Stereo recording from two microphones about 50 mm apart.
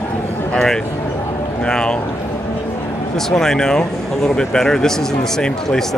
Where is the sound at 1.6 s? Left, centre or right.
Centre.